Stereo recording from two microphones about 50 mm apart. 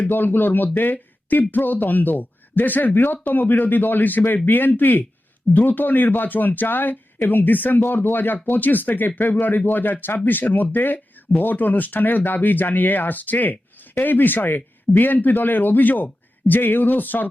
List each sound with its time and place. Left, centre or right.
0.0 s speech: left